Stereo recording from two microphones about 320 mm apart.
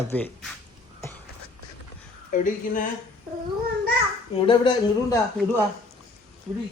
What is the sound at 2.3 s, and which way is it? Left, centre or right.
Speech, left.